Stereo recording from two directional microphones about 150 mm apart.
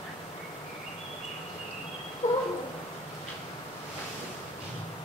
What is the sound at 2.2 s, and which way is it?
Cat, 50° left (ahead or behind).